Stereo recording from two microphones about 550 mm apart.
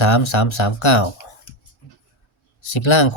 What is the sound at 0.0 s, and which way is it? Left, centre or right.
Speech, left.